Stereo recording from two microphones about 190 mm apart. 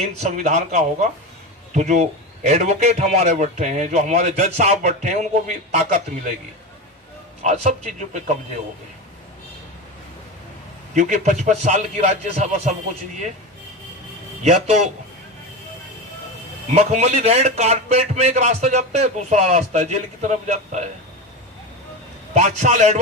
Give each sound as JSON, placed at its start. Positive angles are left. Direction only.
{"t": 0.0, "sound": "a man's voice", "side_deg": -35}
{"t": 7.4, "sound": "a man's voice", "side_deg": -35}
{"t": 10.9, "sound": "a man's voice", "side_deg": -40}
{"t": 14.4, "sound": "a man's voice", "side_deg": -40}
{"t": 16.7, "sound": "a man's voice", "side_deg": -35}
{"t": 22.4, "sound": "a man's voice", "side_deg": -40}